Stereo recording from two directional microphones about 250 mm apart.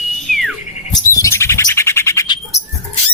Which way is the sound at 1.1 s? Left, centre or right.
Centre.